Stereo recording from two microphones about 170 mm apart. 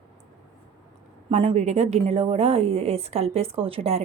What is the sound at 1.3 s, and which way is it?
A woman's voice, 35° right (ahead or behind).